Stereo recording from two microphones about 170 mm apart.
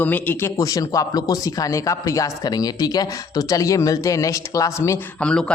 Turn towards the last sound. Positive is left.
turn(degrees=5)  # may be behind; listen again after turning